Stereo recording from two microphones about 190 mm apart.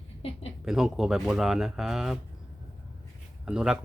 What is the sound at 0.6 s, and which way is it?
Speech, centre (ahead or behind).